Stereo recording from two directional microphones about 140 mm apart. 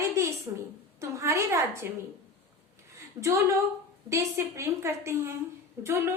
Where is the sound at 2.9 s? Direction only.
20° right (ahead or behind).